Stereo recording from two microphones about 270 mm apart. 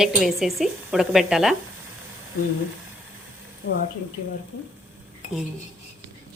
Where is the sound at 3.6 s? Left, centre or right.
Left.